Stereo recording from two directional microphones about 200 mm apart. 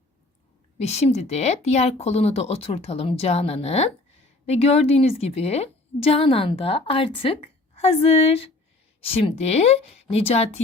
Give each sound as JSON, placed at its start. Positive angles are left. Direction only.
{"t": 0.8, "sound": "a woman's voice", "side_deg": 35}